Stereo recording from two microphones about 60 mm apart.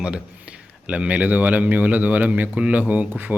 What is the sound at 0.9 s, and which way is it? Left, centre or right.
A man's voice, right.